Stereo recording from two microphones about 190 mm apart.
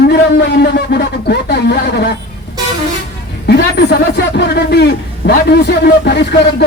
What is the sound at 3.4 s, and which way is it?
A man's voice, 60° left (ahead or behind).